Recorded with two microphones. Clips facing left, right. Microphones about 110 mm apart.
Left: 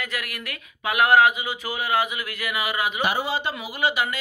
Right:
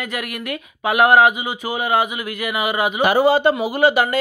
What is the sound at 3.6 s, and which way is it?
Speech, 55° right (ahead or behind).